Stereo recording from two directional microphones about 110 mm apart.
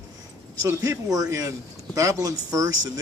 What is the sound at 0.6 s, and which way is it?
A man's voice, 25° right (ahead or behind).